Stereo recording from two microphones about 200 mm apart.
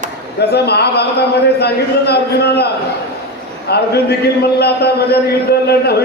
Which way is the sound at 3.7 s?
55° left (ahead or behind).